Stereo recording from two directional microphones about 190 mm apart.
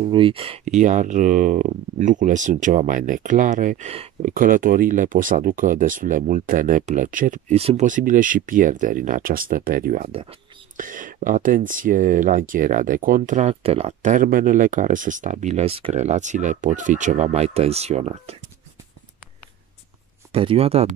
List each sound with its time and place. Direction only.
0.0 s speech: 30° right (ahead or behind)
4.3 s speech: 45° right (ahead or behind)
20.3 s speech: 30° right (ahead or behind)